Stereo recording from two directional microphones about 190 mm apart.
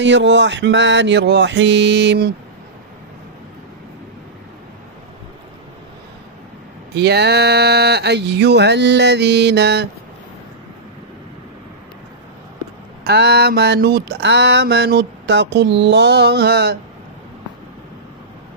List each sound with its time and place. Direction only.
0.0 s mantra: 70° right (ahead or behind)
7.0 s mantra: 60° right (ahead or behind)
13.0 s mantra: 60° right (ahead or behind)